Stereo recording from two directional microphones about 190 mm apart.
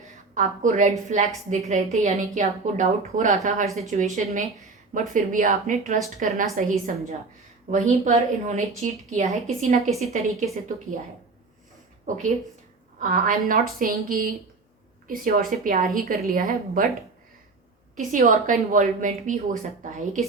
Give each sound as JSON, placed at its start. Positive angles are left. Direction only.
{"t": 0.3, "sound": "a woman's voice", "side_deg": -40}
{"t": 12.0, "sound": "speech", "side_deg": -45}
{"t": 17.9, "sound": "speech", "side_deg": -45}